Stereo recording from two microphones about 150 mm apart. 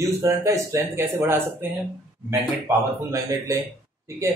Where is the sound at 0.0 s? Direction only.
20° right (ahead or behind).